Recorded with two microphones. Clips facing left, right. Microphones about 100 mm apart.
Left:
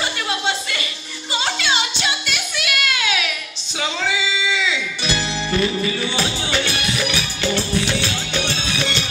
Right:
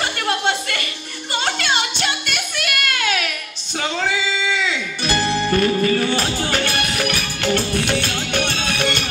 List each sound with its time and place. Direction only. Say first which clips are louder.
0.0 s chuckle: right 2 dB; 55° right (ahead or behind)
1.3 s music: right 1 dB; 55° right (ahead or behind)